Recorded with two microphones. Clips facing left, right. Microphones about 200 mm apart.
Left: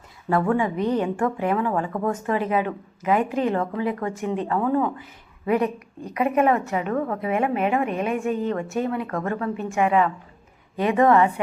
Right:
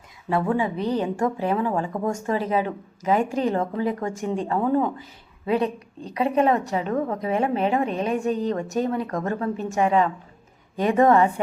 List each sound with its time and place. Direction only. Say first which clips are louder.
0.3 s a woman's voice: left 1 dB; 25° right (ahead or behind)
2.2 s a woman's voice: even; 35° right (ahead or behind)
4.4 s a woman's voice: right 1 dB; 30° right (ahead or behind)